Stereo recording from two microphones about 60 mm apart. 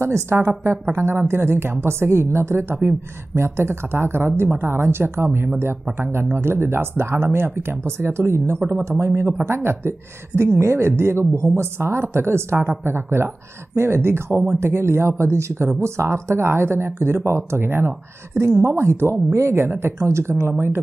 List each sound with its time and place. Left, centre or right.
0.0 s speech: right